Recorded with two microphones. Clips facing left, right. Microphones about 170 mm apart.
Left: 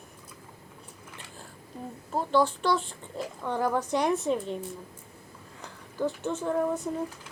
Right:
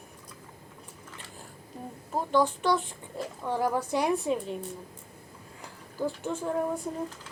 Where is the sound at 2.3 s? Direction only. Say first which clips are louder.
Even; 15° right (ahead or behind).